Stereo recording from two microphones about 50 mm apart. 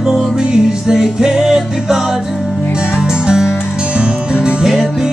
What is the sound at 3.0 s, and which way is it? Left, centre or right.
Music, centre.